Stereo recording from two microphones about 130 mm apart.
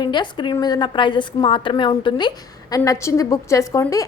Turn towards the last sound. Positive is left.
turn(degrees=25)  # may be behind; listen again after turning